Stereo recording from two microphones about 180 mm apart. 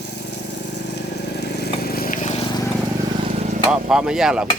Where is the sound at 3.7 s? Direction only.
5° right (ahead or behind).